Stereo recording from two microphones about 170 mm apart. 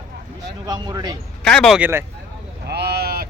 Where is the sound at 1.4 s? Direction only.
5° left (ahead or behind).